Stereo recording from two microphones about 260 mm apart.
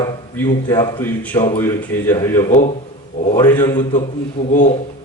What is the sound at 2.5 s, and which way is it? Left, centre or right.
Speech, left.